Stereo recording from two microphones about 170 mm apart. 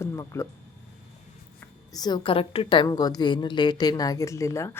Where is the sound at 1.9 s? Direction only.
25° left (ahead or behind).